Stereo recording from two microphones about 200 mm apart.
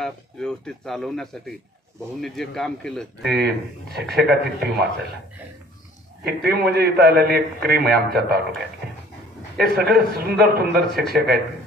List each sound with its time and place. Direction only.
0.0 s speech: 5° left (ahead or behind)
3.3 s a man's voice: 55° right (ahead or behind)
6.2 s a man's voice: 50° right (ahead or behind)
9.6 s a man's voice: 50° right (ahead or behind)